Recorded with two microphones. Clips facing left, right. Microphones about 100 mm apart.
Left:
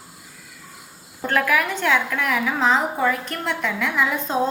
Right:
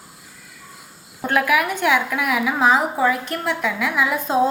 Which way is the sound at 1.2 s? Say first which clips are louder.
Right 2 dB; 10° right (ahead or behind).